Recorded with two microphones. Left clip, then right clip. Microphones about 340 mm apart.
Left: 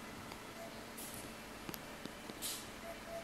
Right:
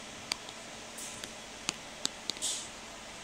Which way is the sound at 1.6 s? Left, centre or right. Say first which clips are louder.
Right 14 dB; right.